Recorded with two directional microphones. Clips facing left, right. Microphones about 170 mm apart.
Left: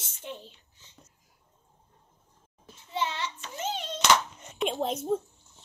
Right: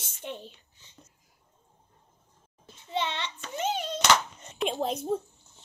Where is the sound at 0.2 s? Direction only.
20° right (ahead or behind).